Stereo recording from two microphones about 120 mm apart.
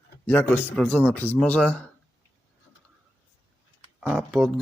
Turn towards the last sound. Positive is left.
turn(degrees=0)  # may be behind; listen again after turning